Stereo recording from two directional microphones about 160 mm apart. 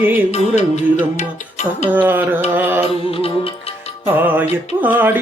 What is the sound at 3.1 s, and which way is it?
Music, 35° left (ahead or behind).